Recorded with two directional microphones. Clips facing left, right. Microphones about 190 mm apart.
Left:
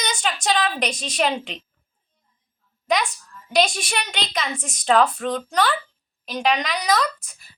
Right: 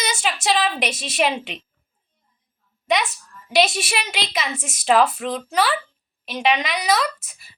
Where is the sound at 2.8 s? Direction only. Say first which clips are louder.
Right 1 dB; centre (ahead or behind).